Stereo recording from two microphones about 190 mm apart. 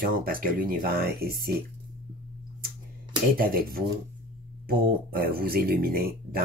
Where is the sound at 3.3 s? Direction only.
50° right (ahead or behind).